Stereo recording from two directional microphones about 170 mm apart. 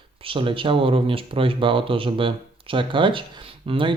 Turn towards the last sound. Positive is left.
turn(degrees=-30)  # may be behind; listen again after turning